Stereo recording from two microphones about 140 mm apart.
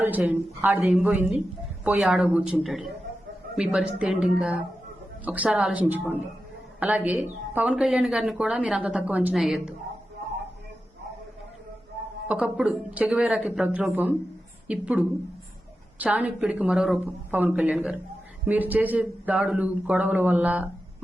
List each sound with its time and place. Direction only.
0.0 s speech: 15° right (ahead or behind)
12.3 s speech: 5° right (ahead or behind)